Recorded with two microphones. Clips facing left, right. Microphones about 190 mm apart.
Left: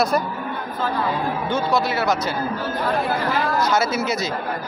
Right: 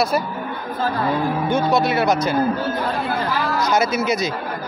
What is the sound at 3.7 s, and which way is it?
Speech, 15° right (ahead or behind).